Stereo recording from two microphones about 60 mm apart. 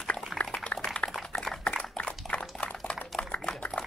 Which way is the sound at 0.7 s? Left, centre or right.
Left.